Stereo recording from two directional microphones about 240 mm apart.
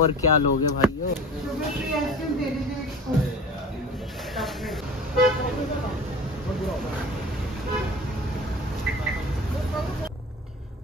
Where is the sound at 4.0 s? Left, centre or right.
Centre.